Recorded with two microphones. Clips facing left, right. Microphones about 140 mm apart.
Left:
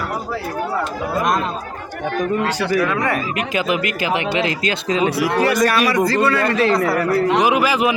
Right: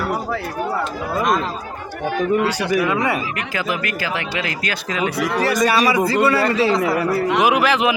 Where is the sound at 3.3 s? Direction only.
20° left (ahead or behind).